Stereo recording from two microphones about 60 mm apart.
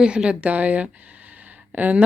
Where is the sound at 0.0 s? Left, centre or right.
Centre.